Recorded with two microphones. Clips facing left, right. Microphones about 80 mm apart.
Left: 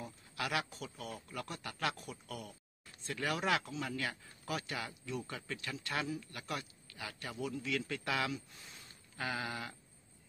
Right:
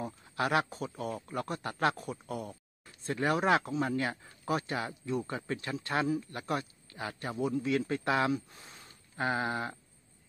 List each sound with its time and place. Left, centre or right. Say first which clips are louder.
0.0 s speech: right 8 dB; right